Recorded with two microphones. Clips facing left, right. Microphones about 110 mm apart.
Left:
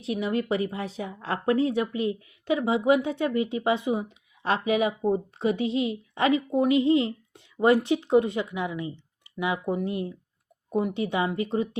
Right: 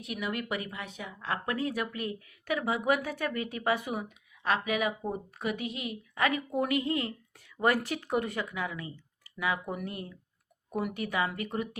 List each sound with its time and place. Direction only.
0.0 s a woman's voice: 30° left (ahead or behind)